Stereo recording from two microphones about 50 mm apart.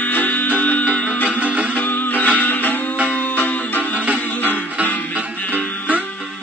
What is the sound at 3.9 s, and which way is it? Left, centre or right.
Music, right.